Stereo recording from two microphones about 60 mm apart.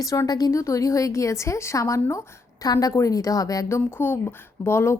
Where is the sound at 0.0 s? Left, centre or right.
Left.